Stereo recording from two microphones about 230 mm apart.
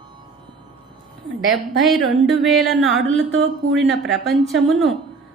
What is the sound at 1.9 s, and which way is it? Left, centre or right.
A woman's voice, centre.